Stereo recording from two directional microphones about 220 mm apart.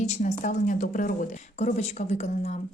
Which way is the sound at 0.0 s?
30° left (ahead or behind).